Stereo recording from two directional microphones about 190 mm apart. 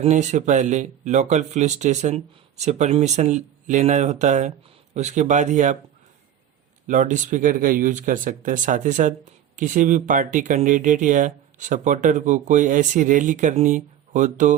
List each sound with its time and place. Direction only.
0.0 s speech: 35° right (ahead or behind)
6.8 s speech: 40° right (ahead or behind)